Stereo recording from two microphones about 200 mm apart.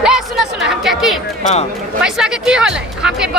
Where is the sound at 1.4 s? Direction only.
35° left (ahead or behind).